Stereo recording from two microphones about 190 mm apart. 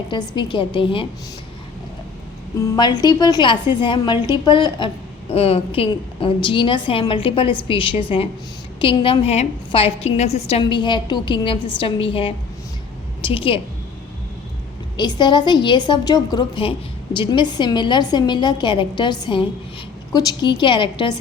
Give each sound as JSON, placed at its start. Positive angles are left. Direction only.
{"t": 0.1, "sound": "a woman's voice", "side_deg": 25}
{"t": 2.6, "sound": "a woman's voice", "side_deg": 20}
{"t": 10.6, "sound": "a woman's voice", "side_deg": 25}
{"t": 14.9, "sound": "a woman's voice", "side_deg": 25}